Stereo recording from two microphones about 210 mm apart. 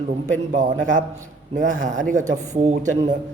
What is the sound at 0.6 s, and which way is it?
Speech, 40° right (ahead or behind).